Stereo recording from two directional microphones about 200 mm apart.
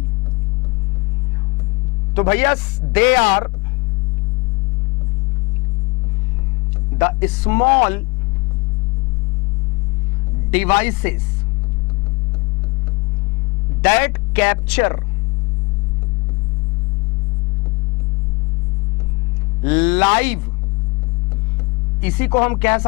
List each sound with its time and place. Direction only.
2.1 s speech: 15° left (ahead or behind)
3.2 s speech: 25° left (ahead or behind)
7.0 s speech: 15° left (ahead or behind)
10.5 s speech: 10° left (ahead or behind)
13.8 s speech: 15° left (ahead or behind)
19.6 s speech: 10° left (ahead or behind)
22.0 s speech: 10° left (ahead or behind)